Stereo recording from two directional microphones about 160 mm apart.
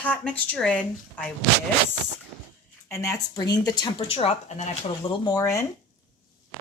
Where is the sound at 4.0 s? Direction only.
40° left (ahead or behind).